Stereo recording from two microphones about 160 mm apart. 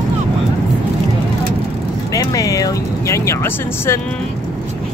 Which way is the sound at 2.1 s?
20° left (ahead or behind).